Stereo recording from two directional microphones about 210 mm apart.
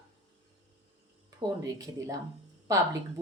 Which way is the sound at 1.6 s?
15° right (ahead or behind).